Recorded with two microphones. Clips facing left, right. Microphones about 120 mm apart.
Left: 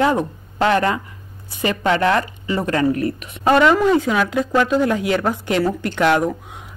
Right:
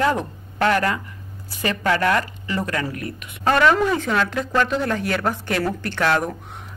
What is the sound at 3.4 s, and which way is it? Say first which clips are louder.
Speech: left 3 dB; 15° left (ahead or behind).